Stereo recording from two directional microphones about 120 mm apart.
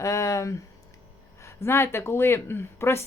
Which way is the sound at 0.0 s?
25° left (ahead or behind).